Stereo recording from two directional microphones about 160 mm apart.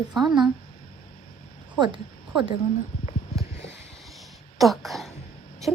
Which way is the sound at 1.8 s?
30° right (ahead or behind).